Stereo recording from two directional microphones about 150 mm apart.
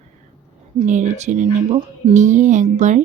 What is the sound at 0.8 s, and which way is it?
Speech, 55° right (ahead or behind).